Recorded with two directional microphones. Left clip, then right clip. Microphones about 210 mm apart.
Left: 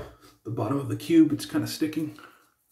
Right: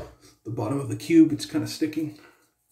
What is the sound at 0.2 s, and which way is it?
Speech, centre (ahead or behind).